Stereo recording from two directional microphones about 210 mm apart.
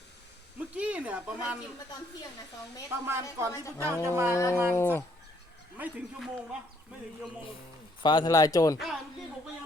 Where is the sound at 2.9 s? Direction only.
10° right (ahead or behind).